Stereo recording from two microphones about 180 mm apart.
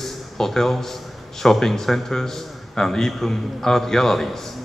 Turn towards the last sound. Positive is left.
turn(degrees=0)  # may be behind; listen again after turning